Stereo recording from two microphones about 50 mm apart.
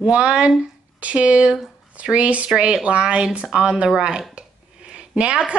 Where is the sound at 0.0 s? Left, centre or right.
Right.